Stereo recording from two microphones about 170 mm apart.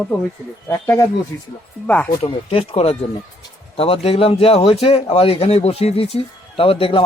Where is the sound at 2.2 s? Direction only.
35° left (ahead or behind).